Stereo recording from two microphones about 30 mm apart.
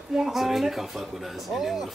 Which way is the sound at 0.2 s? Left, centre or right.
Centre.